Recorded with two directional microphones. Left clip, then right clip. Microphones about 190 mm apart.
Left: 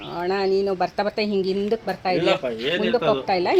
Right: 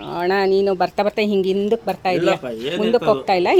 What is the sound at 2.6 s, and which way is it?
Speech, 55° right (ahead or behind).